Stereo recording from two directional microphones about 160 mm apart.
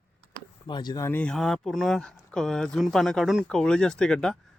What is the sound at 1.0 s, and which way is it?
Speech, 10° left (ahead or behind).